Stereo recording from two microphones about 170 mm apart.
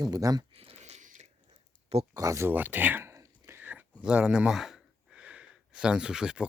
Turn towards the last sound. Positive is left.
turn(degrees=-5)  # may be behind; listen again after turning